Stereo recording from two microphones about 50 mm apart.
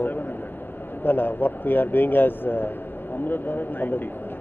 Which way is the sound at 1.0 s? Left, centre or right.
Left.